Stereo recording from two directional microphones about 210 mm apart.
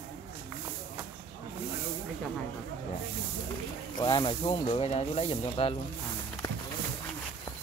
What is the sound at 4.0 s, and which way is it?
Speech, 20° left (ahead or behind).